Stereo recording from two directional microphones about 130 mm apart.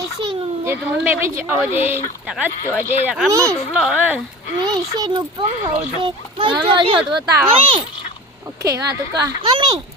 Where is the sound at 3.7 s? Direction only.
10° right (ahead or behind).